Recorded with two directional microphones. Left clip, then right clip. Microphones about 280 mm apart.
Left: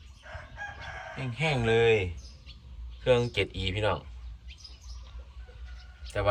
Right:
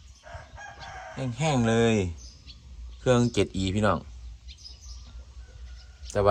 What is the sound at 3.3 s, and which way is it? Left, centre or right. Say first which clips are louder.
Speech: right 3 dB; right.